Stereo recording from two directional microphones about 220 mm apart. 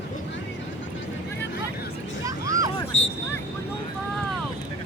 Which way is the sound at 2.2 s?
15° right (ahead or behind).